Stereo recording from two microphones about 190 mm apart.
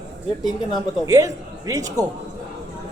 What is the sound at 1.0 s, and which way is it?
Speech, 20° right (ahead or behind).